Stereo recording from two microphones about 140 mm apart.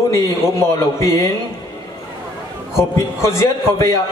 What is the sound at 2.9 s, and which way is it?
Speech, 20° left (ahead or behind).